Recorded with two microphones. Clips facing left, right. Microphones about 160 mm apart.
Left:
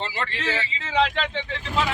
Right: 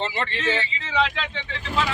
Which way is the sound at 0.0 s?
Centre (ahead or behind).